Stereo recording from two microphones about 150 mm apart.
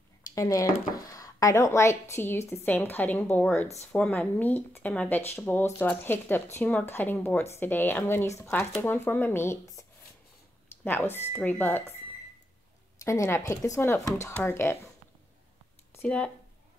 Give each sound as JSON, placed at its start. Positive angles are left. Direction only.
{"t": 0.3, "sound": "speech", "side_deg": 20}
{"t": 13.0, "sound": "speech", "side_deg": 20}
{"t": 15.9, "sound": "a sound", "side_deg": 10}